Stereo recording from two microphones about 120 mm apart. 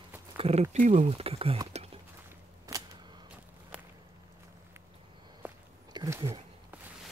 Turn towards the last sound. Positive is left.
turn(degrees=-25)  # may be behind; listen again after turning